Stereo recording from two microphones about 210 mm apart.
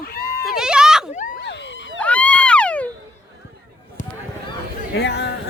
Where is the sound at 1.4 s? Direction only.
55° left (ahead or behind).